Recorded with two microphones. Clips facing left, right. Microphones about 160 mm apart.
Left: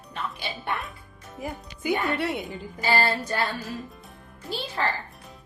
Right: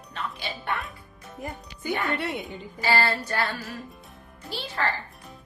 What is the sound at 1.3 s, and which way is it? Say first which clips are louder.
A woman's voice: left 2 dB; 10° left (ahead or behind).